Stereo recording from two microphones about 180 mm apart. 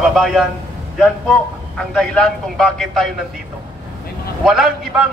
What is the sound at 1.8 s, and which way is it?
A man's voice, 5° left (ahead or behind).